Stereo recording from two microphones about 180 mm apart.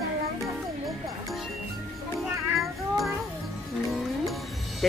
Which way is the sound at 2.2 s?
Centre (ahead or behind).